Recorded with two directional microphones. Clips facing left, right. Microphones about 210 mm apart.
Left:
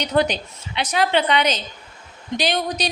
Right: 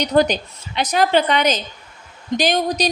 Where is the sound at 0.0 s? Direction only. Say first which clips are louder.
Right 4 dB; 40° right (ahead or behind).